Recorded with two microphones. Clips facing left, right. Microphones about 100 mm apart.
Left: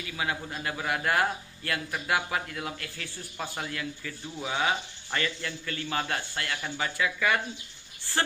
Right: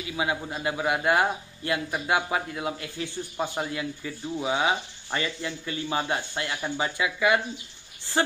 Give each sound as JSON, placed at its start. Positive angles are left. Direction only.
{"t": 0.1, "sound": "a man's voice", "side_deg": -20}